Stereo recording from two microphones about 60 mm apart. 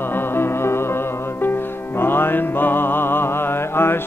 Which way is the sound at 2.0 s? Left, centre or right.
Left.